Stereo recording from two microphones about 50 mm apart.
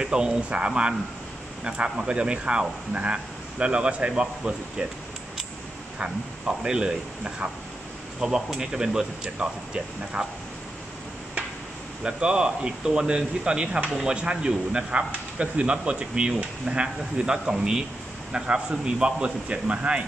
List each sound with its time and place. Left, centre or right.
0.0 s speech: centre
6.0 s speech: centre
12.0 s speech: centre
14.1 s speech: right